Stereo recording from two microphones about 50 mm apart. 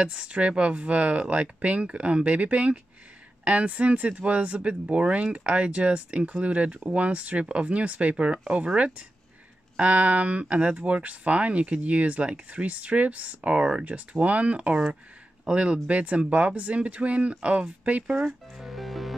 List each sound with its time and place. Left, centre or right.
0.0 s speech: right
18.6 s music: centre